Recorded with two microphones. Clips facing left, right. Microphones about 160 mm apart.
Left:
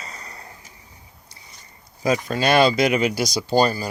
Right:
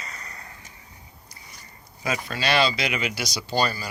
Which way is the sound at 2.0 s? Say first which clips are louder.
Left 7 dB; 40° left (ahead or behind).